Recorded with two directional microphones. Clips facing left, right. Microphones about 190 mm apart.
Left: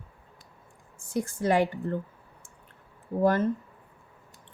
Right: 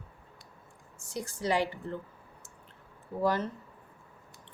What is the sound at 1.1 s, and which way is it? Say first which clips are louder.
Speech: left 5 dB; 55° left (ahead or behind).